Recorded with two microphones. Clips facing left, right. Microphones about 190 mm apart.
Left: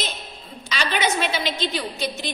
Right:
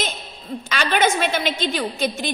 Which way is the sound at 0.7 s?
50° right (ahead or behind).